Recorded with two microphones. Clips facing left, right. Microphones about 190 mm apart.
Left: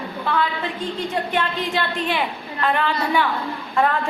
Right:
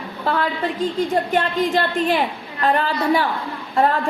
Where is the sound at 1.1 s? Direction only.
45° right (ahead or behind).